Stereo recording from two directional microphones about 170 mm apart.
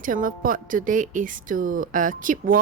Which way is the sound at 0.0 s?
55° right (ahead or behind).